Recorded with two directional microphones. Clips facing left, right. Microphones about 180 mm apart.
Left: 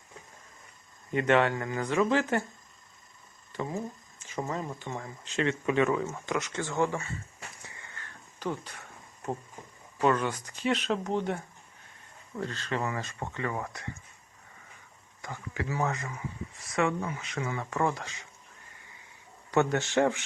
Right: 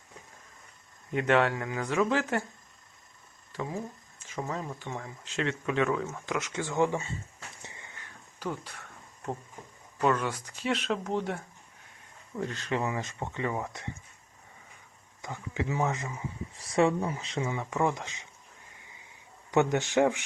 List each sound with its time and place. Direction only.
1.1 s speech: centre (ahead or behind)
3.5 s speech: 5° right (ahead or behind)
7.6 s a sound: 20° right (ahead or behind); by 8.8 s centre (ahead or behind)
9.2 s speech: 5° left (ahead or behind)
12.4 s speech: 15° right (ahead or behind)
15.2 s speech: 20° right (ahead or behind)
16.6 s speech: 30° right (ahead or behind)
19.5 s speech: 15° right (ahead or behind)